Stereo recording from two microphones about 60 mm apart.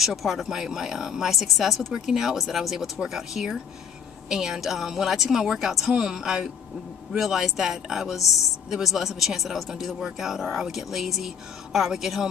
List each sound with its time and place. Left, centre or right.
0.0 s speech: centre